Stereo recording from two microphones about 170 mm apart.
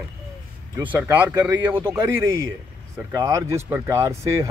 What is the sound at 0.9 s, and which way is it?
Speech, 10° right (ahead or behind).